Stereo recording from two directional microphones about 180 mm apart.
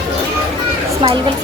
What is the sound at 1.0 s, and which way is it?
Speech, 30° right (ahead or behind).